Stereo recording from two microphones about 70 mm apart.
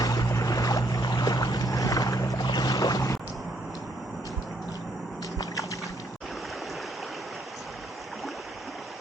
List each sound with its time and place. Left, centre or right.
0.0 s boat: left
0.3 s boat: left